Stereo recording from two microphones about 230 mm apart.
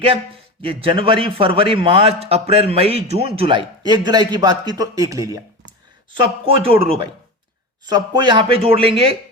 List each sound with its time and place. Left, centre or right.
0.6 s a man's voice: right